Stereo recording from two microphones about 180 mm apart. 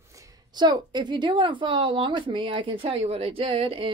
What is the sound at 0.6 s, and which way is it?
A woman's voice, 25° right (ahead or behind).